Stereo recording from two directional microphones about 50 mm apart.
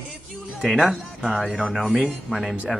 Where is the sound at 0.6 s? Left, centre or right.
Centre.